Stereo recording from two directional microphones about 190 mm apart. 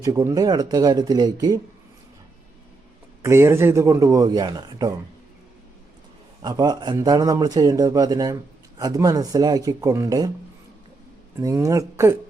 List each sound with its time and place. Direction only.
0.0 s a man's voice: 20° right (ahead or behind)
3.2 s speech: 15° right (ahead or behind)
6.4 s a man's voice: 20° right (ahead or behind)
11.3 s speech: 15° right (ahead or behind)